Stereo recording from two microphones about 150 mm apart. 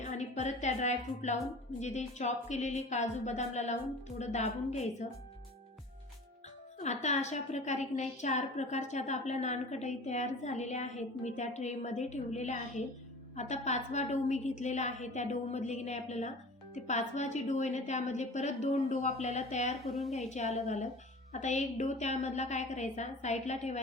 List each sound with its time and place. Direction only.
0.0 s a woman's voice: 50° left (ahead or behind)
6.7 s a woman's voice: 50° left (ahead or behind)
19.9 s a woman's voice: centre (ahead or behind)
20.1 s a woman's voice: 45° left (ahead or behind)